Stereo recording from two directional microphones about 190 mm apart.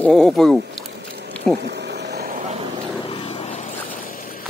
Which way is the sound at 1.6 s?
60° right (ahead or behind).